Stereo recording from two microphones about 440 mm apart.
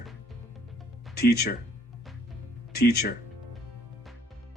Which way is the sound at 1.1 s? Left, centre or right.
Left.